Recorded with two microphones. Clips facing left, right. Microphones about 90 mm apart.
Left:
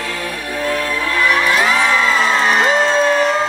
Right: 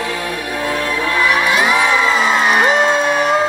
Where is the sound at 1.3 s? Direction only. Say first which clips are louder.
Even; 5° right (ahead or behind).